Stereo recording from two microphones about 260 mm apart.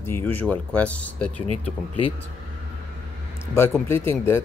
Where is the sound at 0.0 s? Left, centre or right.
Centre.